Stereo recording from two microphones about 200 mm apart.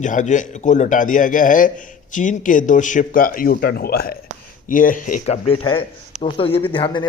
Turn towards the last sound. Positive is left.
turn(degrees=25)  # may be behind; listen again after turning